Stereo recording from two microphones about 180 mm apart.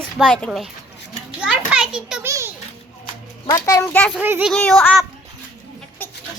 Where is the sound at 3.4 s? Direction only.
20° left (ahead or behind).